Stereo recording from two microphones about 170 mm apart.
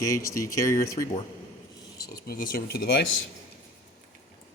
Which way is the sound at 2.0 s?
65° left (ahead or behind).